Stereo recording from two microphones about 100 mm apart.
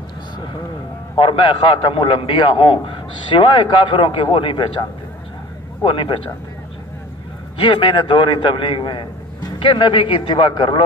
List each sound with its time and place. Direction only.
1.1 s a man's voice: 60° left (ahead or behind)
5.8 s a man's voice: 55° left (ahead or behind)
7.7 s a man's voice: 55° left (ahead or behind)